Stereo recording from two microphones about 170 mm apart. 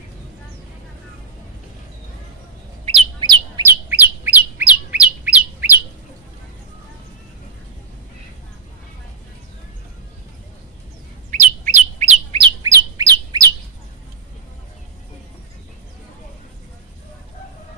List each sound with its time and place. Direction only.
2.8 s bird: 30° right (ahead or behind)
3.7 s bird: 10° right (ahead or behind)
11.3 s bird: 45° right (ahead or behind)
12.6 s bird: 20° right (ahead or behind)